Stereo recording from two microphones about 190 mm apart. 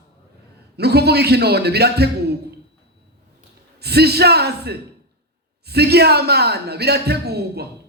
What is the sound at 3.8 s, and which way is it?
Speech, 60° right (ahead or behind).